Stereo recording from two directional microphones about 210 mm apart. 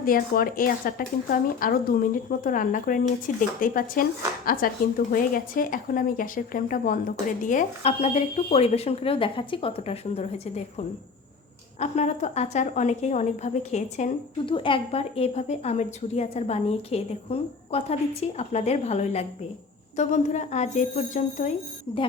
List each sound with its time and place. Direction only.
0.0 s a woman's voice: 45° left (ahead or behind)